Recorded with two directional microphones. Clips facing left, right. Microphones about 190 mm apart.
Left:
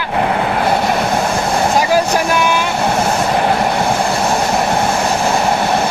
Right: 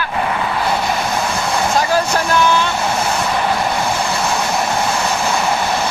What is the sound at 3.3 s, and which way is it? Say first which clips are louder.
Train: left 3 dB; 45° left (ahead or behind).